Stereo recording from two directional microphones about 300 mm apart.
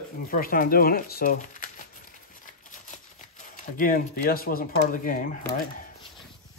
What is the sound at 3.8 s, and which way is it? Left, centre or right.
Speech, left.